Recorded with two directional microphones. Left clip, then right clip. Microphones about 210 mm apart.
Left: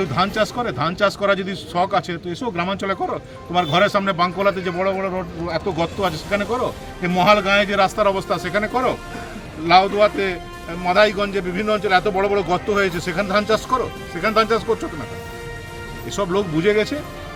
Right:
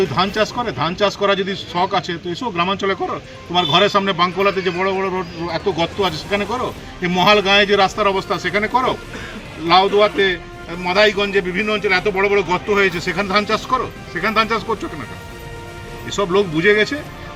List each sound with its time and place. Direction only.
0.2 s a man's voice: 25° left (ahead or behind)
16.0 s a man's voice: 30° left (ahead or behind)